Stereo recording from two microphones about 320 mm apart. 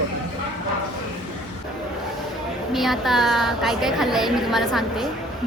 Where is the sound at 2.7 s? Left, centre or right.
Centre.